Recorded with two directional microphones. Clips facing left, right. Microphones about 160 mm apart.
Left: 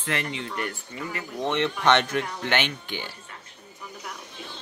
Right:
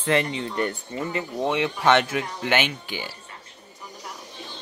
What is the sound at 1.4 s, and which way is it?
Speech, 10° right (ahead or behind).